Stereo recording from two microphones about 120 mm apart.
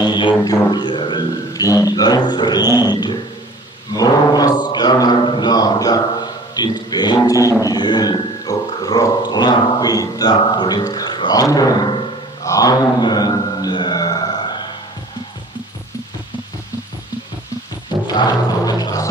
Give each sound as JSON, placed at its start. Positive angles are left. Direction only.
{"t": 0.0, "sound": "speech", "side_deg": 40}
{"t": 3.9, "sound": "mantra", "side_deg": 30}
{"t": 6.5, "sound": "speech", "side_deg": 35}
{"t": 12.4, "sound": "a sound", "side_deg": 30}
{"t": 18.0, "sound": "music", "side_deg": 35}